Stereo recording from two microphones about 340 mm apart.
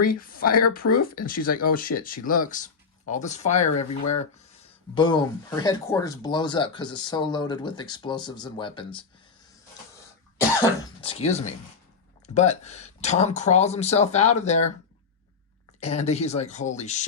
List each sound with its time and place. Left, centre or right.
0.0 s speech: left
4.9 s speech: centre
10.6 s speech: centre
15.8 s speech: centre